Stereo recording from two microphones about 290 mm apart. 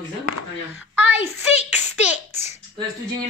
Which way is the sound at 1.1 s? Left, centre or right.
Left.